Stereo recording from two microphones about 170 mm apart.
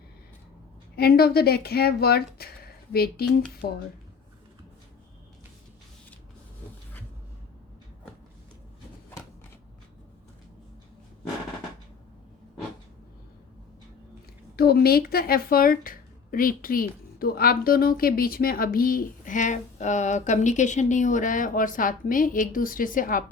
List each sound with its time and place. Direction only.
0.9 s speech: 65° left (ahead or behind)
14.5 s speech: 65° left (ahead or behind)